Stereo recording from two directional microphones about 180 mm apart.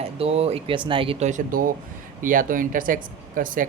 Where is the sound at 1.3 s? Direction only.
50° right (ahead or behind).